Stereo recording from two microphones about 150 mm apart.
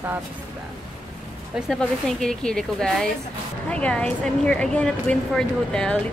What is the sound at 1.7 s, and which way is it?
A woman's voice, 5° left (ahead or behind).